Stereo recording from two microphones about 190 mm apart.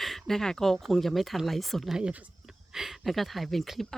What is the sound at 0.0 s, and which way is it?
Speech, centre (ahead or behind).